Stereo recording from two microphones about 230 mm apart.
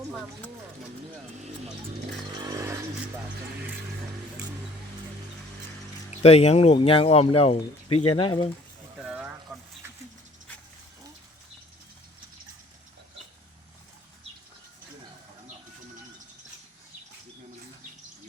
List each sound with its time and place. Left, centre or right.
2.3 s vehicle: centre
6.1 s speech: left
9.0 s a sound: centre